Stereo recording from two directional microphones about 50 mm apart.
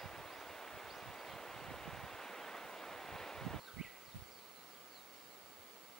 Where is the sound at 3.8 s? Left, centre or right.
Centre.